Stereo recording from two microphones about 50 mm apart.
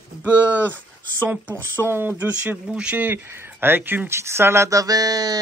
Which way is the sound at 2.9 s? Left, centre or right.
Right.